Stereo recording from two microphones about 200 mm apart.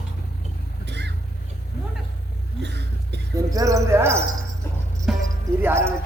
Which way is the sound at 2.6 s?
60° right (ahead or behind).